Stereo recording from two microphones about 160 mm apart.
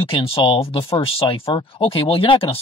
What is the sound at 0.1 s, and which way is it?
Speech, 35° left (ahead or behind).